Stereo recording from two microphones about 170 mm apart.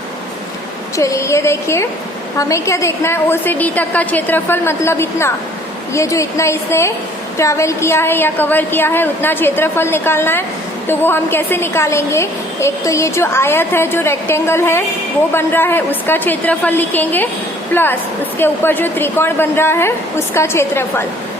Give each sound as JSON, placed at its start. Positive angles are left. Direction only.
{"t": 0.9, "sound": "a woman's voice", "side_deg": 20}